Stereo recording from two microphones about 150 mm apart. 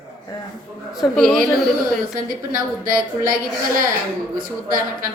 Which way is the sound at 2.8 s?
70° right (ahead or behind).